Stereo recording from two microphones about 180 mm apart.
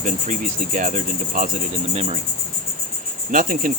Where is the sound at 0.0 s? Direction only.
45° right (ahead or behind).